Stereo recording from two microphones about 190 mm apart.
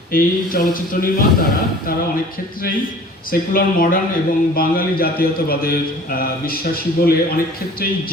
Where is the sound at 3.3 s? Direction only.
50° left (ahead or behind).